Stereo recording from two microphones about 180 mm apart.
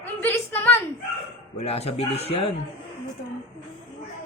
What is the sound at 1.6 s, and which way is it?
Speech, 35° left (ahead or behind).